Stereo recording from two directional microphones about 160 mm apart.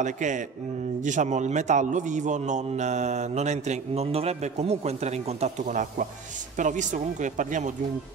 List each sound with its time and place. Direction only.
0.0 s a man's voice: 50° right (ahead or behind)